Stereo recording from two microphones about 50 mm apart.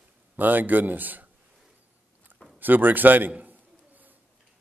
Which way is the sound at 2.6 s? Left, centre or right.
Right.